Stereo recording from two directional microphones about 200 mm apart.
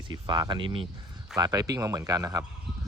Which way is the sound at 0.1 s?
20° right (ahead or behind).